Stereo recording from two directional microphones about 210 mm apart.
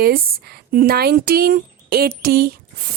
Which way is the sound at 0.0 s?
45° right (ahead or behind).